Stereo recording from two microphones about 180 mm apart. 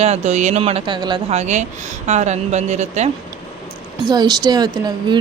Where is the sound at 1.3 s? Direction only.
40° right (ahead or behind).